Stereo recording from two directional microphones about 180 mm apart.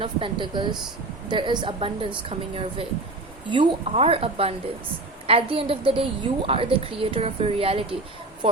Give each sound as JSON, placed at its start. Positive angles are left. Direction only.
{"t": 0.0, "sound": "a woman's voice", "side_deg": -25}